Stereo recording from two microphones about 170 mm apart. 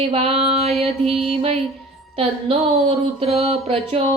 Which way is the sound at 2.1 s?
35° right (ahead or behind).